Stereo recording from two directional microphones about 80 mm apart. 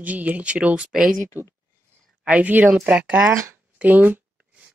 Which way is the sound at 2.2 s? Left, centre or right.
Centre.